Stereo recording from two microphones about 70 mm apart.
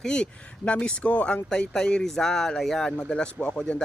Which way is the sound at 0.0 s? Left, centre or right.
Centre.